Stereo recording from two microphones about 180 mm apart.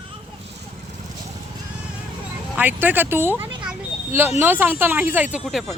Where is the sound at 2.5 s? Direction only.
10° right (ahead or behind).